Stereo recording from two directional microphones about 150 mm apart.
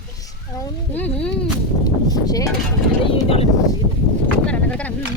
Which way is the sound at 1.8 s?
25° left (ahead or behind).